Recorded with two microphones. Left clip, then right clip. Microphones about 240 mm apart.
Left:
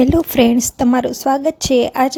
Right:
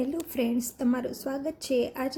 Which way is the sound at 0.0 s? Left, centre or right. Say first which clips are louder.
Left 17 dB; left.